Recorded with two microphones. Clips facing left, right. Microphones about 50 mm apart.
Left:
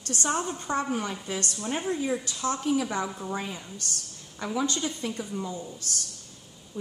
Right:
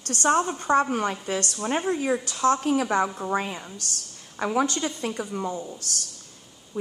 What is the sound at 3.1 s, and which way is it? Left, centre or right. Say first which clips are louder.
Speech: right 6 dB; right.